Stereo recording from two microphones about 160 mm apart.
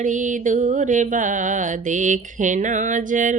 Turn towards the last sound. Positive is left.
turn(degrees=-55)  # may be behind; listen again after turning